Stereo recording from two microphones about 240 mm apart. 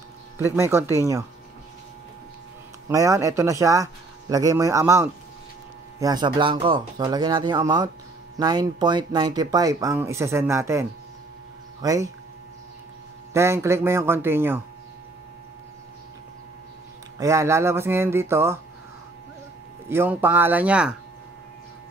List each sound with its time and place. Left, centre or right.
0.4 s speech: centre
2.9 s speech: centre
13.3 s speech: centre
17.2 s speech: centre
19.9 s speech: centre